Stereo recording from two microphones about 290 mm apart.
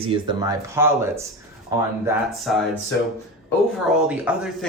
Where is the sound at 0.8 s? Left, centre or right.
Centre.